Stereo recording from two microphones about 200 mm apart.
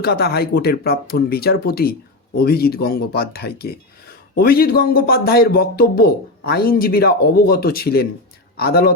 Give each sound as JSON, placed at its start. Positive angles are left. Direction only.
{"t": 0.0, "sound": "speech", "side_deg": 55}